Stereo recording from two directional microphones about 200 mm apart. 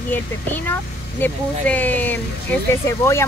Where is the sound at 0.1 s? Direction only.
10° left (ahead or behind).